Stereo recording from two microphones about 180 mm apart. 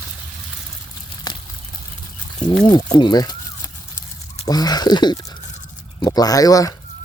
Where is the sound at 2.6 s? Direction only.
25° left (ahead or behind).